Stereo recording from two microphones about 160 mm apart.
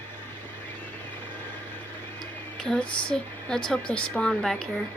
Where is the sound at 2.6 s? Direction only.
5° left (ahead or behind).